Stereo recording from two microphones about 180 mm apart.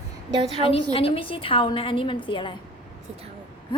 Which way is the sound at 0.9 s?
30° left (ahead or behind).